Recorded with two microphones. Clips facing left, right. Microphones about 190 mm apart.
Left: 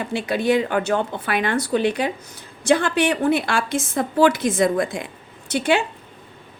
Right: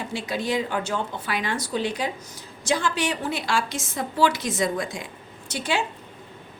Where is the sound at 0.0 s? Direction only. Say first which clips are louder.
Left 6 dB; 60° left (ahead or behind).